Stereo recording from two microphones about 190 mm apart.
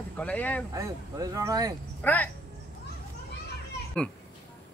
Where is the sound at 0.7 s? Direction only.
20° right (ahead or behind).